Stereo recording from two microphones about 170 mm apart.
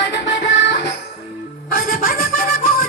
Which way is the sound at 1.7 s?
55° left (ahead or behind).